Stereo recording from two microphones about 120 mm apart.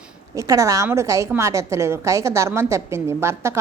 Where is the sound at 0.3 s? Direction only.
25° right (ahead or behind).